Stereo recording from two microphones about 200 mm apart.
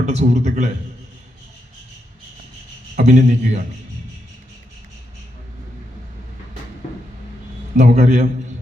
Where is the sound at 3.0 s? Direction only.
35° right (ahead or behind).